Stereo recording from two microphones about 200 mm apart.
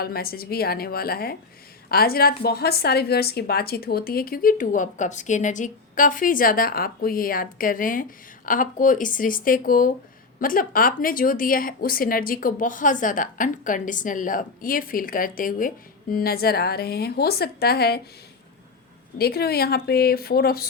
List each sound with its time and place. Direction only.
0.0 s a woman's voice: 50° left (ahead or behind)
19.2 s a woman's voice: 50° left (ahead or behind)